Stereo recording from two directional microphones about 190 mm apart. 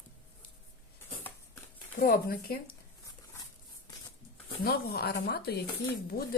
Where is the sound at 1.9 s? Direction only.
50° left (ahead or behind).